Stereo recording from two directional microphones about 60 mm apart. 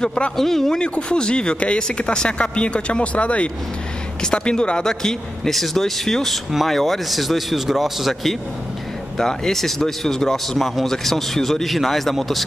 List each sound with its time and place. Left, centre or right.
0.0 s speech: centre